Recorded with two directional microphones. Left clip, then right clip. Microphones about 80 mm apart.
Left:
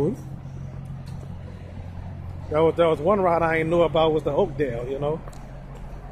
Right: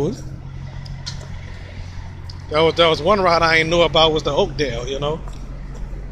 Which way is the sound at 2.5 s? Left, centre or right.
Left.